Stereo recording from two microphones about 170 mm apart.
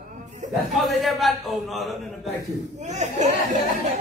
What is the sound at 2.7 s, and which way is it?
Speech, 45° right (ahead or behind).